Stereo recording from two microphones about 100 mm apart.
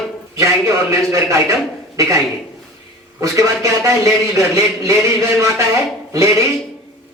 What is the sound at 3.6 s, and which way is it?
Speech, 30° right (ahead or behind).